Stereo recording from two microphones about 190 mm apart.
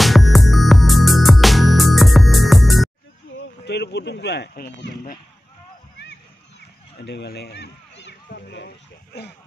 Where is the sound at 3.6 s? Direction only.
60° left (ahead or behind).